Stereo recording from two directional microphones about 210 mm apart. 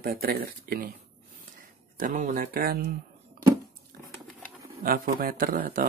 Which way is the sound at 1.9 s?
40° right (ahead or behind).